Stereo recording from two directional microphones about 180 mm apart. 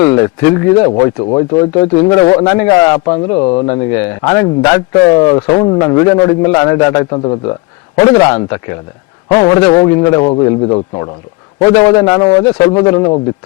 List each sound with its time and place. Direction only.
0.0 s a man's voice: 20° left (ahead or behind)
12.2 s a man's voice: 25° left (ahead or behind)